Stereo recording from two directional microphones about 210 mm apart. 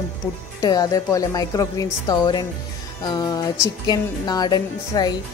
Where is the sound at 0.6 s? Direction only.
15° left (ahead or behind).